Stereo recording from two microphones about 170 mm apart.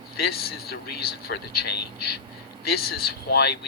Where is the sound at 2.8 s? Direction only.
70° left (ahead or behind).